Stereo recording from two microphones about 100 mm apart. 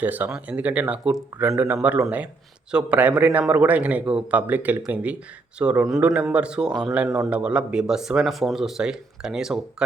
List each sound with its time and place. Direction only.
0.0 s a man's voice: 20° right (ahead or behind)